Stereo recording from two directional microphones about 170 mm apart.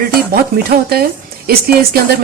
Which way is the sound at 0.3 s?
65° right (ahead or behind).